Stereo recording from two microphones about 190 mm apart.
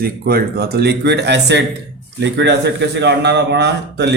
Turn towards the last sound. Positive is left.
turn(degrees=-65)  # may be behind; listen again after turning